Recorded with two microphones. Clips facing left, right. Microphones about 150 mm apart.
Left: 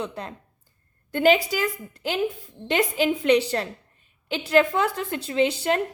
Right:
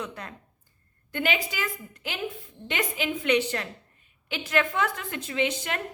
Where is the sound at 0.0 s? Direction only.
30° left (ahead or behind).